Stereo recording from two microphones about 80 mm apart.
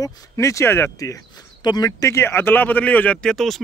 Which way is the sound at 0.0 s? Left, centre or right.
Left.